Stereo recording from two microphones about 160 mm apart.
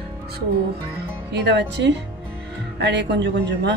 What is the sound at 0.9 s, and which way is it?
Speech, 90° right.